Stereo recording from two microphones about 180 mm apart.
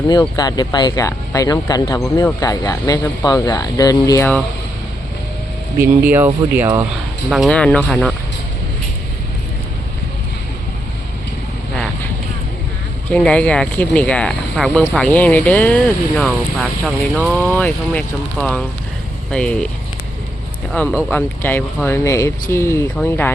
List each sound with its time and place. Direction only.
0.1 s speech: 25° left (ahead or behind)
5.8 s speech: 10° right (ahead or behind)
7.3 s speech: centre (ahead or behind)
13.1 s speech: 5° left (ahead or behind)
20.8 s speech: 10° left (ahead or behind)